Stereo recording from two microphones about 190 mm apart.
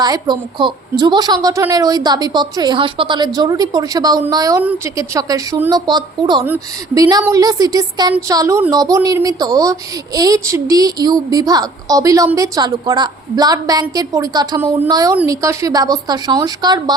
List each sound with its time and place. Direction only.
0.0 s a woman's voice: 20° right (ahead or behind)